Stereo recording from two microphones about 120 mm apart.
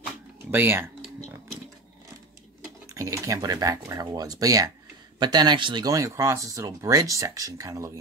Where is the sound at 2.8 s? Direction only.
25° right (ahead or behind).